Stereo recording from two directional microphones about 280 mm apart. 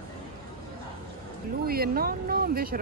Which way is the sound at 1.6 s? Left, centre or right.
Right.